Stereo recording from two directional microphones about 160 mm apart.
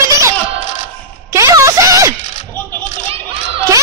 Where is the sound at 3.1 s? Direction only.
35° right (ahead or behind).